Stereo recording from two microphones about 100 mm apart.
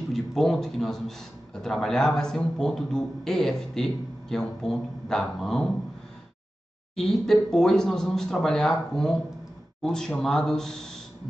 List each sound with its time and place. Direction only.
0.1 s a man's voice: centre (ahead or behind)
7.0 s a man's voice: 5° left (ahead or behind)